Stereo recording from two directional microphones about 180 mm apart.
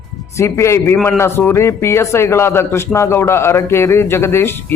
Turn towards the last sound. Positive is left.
turn(degrees=15)  # may be behind; listen again after turning